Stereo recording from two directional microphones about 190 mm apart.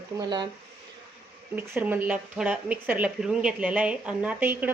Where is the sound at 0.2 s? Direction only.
20° right (ahead or behind).